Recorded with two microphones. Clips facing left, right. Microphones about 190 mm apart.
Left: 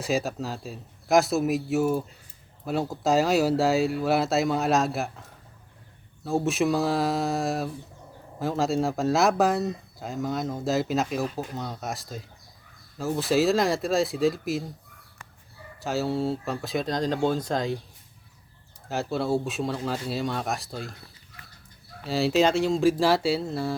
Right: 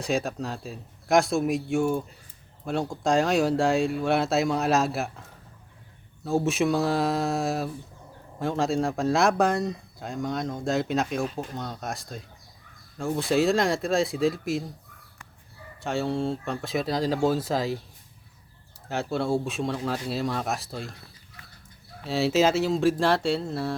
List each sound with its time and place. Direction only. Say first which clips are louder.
0.0 s speech: even; centre (ahead or behind)
15.8 s speech: left 1 dB; centre (ahead or behind)
18.9 s speech: even; centre (ahead or behind)
22.0 s speech: even; centre (ahead or behind)